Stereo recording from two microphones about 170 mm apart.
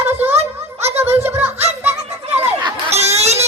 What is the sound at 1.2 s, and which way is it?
Music, 10° right (ahead or behind).